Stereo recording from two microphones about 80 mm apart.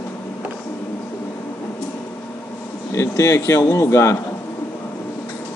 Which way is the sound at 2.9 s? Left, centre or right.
Left.